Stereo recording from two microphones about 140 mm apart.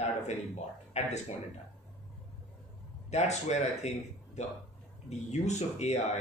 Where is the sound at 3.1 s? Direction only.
55° left (ahead or behind).